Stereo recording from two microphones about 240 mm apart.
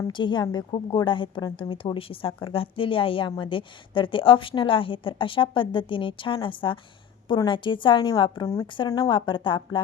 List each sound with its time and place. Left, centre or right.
0.1 s a woman's voice: centre